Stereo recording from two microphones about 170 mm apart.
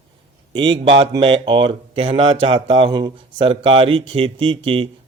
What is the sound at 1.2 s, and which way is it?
Speech, 30° right (ahead or behind).